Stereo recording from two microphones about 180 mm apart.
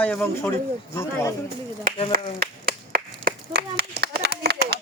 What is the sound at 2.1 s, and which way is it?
Clapping, 55° right (ahead or behind).